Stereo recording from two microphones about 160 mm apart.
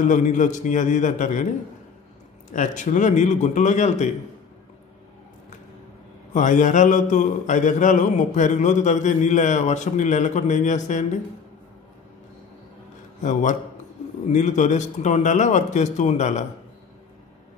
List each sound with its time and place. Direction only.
0.0 s a man's voice: 50° left (ahead or behind)
2.5 s a man's voice: 55° left (ahead or behind)
6.3 s a man's voice: 50° left (ahead or behind)
13.2 s a man's voice: 50° left (ahead or behind)